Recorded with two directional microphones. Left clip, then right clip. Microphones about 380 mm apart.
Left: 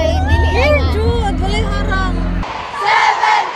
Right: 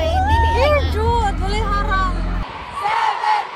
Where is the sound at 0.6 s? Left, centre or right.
Centre.